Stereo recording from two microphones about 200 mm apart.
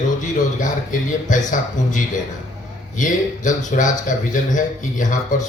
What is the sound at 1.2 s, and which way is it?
A man's voice, 40° left (ahead or behind).